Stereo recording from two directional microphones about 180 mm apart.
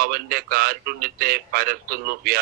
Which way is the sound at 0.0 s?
55° right (ahead or behind).